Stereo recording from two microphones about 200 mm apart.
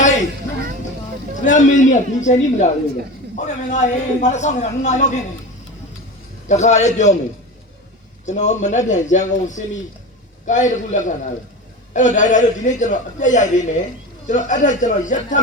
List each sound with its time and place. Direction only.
1.5 s a man's voice: 40° left (ahead or behind)
6.5 s a man's voice: 35° left (ahead or behind)
8.3 s a man's voice: 35° left (ahead or behind)